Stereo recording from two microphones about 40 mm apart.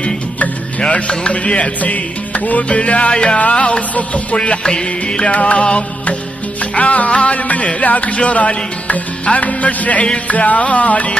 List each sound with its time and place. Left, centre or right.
0.0 s music: left